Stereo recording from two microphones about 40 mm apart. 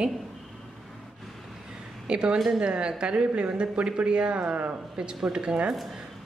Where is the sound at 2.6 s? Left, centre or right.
Right.